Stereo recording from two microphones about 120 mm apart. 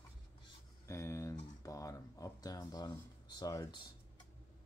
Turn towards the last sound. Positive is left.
turn(degrees=30)  # may be behind; listen again after turning